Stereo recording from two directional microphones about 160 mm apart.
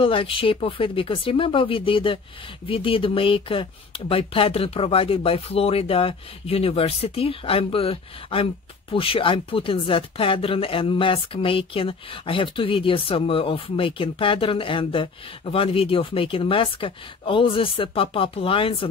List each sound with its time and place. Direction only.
0.0 s speech: 35° left (ahead or behind)